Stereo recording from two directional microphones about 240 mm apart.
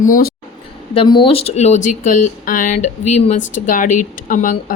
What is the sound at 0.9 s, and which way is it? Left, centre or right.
A woman's voice, centre.